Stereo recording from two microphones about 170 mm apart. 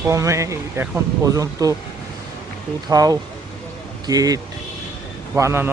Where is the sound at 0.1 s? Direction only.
20° right (ahead or behind).